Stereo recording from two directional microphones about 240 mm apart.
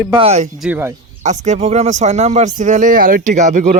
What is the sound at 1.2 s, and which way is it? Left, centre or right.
Speech, right.